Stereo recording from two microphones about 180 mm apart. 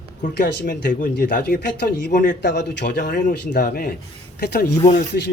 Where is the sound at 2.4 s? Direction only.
70° left (ahead or behind).